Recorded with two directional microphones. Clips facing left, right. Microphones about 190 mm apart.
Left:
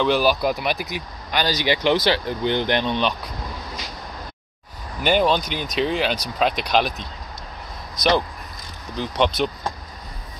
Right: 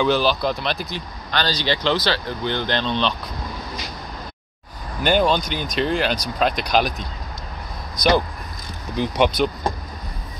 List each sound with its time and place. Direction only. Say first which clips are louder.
0.0 s speech: even; 5° left (ahead or behind)
5.0 s speech: even; centre (ahead or behind)
8.9 s speech: right 2 dB; 10° right (ahead or behind)